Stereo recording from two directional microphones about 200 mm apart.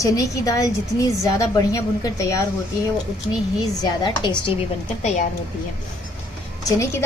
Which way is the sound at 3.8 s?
20° left (ahead or behind).